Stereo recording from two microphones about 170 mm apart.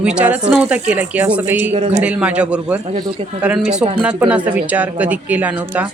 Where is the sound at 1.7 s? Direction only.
40° right (ahead or behind).